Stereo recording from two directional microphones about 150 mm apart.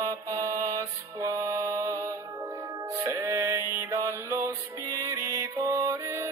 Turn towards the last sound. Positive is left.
turn(degrees=-20)  # may be behind; listen again after turning